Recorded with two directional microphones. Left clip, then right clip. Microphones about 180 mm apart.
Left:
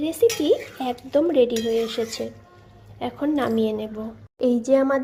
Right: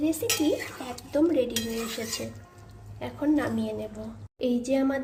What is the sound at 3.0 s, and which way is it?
Speech, 25° left (ahead or behind).